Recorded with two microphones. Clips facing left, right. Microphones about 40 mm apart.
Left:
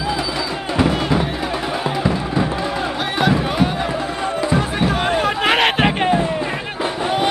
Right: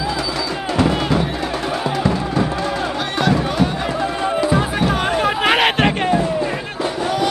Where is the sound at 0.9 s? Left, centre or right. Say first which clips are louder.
Even; centre.